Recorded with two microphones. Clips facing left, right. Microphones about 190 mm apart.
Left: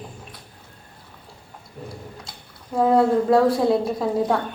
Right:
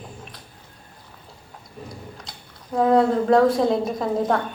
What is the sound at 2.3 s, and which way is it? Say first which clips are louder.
Speech: right 3 dB; 5° left (ahead or behind).